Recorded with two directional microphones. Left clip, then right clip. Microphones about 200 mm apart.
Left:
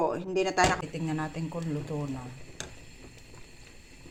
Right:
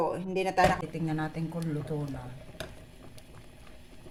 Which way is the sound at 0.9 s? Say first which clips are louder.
Even; 15° left (ahead or behind).